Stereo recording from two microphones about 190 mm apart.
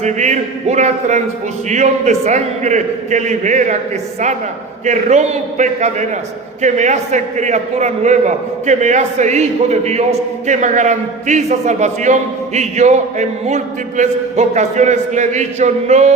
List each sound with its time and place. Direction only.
0.0 s a man's voice: 40° right (ahead or behind)
4.9 s a man's voice: 40° right (ahead or behind)